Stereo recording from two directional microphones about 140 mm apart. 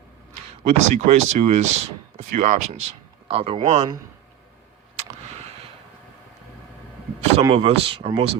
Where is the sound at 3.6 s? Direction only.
55° right (ahead or behind).